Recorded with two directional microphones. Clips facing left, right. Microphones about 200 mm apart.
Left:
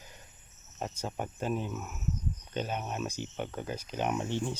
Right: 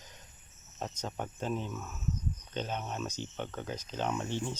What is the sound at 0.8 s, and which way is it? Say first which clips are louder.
Speech: left 2 dB; 10° left (ahead or behind).